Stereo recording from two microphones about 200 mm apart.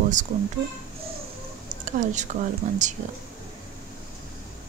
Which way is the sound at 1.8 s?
40° right (ahead or behind).